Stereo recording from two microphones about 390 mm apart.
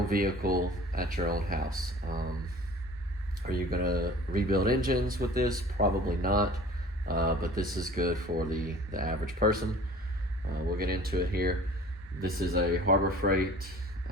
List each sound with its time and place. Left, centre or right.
0.1 s speech: right
3.4 s speech: right
10.8 s speech: right